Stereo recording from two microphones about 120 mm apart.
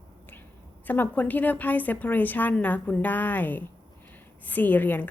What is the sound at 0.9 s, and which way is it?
A woman's voice, 15° left (ahead or behind).